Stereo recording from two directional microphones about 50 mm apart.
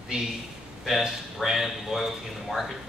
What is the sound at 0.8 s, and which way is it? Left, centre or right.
Speech, centre.